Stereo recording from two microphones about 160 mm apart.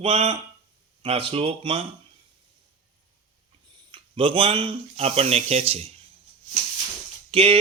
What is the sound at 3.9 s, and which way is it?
Speech, 35° right (ahead or behind).